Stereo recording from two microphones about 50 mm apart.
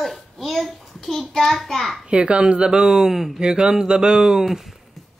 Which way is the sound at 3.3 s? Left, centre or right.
Centre.